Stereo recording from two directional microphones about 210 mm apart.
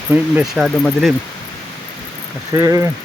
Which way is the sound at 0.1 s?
5° right (ahead or behind).